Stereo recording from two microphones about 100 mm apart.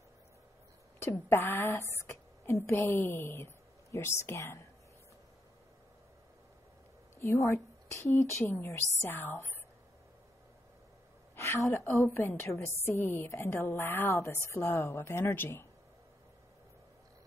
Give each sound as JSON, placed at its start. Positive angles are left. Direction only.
{"t": 0.9, "sound": "a woman's voice", "side_deg": 25}
{"t": 7.2, "sound": "a woman's voice", "side_deg": 30}
{"t": 11.3, "sound": "a woman's voice", "side_deg": 25}